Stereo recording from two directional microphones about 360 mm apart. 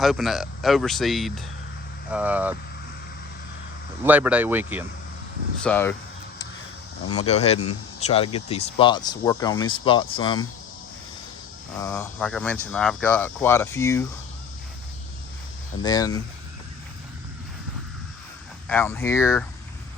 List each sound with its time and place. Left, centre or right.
0.0 s speech: centre
4.0 s speech: centre
5.6 s speech: centre
7.2 s speech: centre
11.8 s speech: centre
15.8 s speech: centre
18.7 s speech: centre